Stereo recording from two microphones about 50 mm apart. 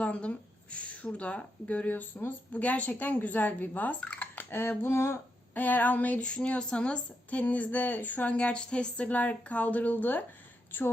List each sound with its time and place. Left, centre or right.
0.0 s a woman's voice: left
4.5 s a sound: left
5.5 s a woman's voice: left
6.1 s speech: left